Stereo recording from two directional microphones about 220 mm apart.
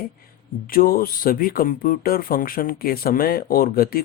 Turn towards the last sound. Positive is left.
turn(degrees=40)  # may be behind; listen again after turning